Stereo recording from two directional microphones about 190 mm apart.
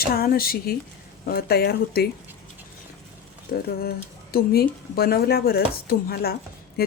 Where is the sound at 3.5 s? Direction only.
55° left (ahead or behind).